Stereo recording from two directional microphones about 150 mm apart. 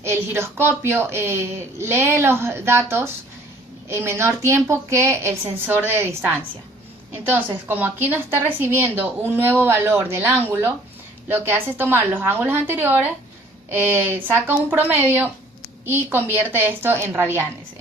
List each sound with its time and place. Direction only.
0.0 s a woman's voice: 15° right (ahead or behind)